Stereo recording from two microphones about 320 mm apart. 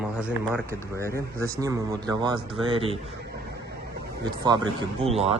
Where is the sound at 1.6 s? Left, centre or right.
Centre.